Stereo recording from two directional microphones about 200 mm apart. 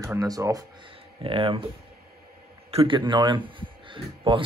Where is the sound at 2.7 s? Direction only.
25° right (ahead or behind).